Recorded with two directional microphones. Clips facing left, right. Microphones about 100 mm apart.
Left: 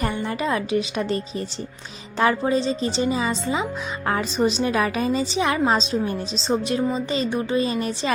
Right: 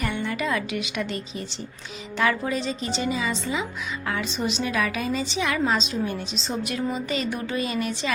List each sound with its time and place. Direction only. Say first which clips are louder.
0.0 s a woman's voice: left 2 dB; 35° left (ahead or behind)